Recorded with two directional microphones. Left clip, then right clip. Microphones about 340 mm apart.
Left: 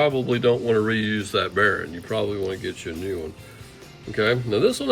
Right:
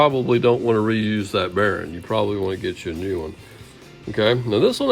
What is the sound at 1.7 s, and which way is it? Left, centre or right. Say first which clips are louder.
Speech: right 2 dB; centre.